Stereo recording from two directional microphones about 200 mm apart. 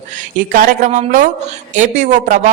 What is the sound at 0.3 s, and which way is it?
A woman's voice, 40° right (ahead or behind).